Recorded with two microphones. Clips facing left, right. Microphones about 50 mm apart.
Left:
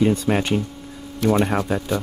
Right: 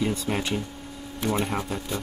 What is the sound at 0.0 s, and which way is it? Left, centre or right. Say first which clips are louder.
Speech: left 8 dB; left.